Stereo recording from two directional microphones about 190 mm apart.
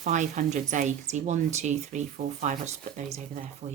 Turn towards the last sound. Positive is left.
turn(degrees=-35)  # may be behind; listen again after turning